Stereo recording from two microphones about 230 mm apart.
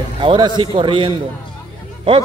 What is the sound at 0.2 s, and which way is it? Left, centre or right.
Speech, right.